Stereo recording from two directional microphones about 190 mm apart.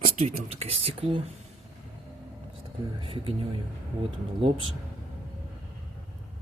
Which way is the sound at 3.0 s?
30° right (ahead or behind).